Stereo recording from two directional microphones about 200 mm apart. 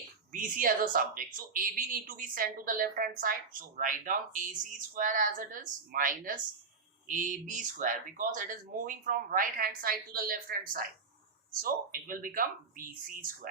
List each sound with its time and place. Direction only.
0.3 s speech: 45° right (ahead or behind)